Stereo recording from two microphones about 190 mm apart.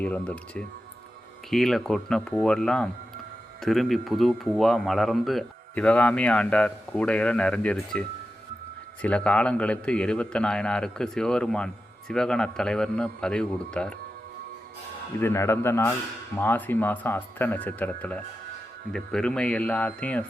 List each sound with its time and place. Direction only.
0.0 s a man's voice: 5° left (ahead or behind)
15.2 s a man's voice: 15° left (ahead or behind)